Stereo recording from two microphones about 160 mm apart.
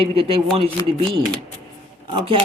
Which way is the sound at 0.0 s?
35° right (ahead or behind).